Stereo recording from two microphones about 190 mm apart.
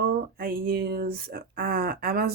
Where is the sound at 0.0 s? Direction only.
50° right (ahead or behind).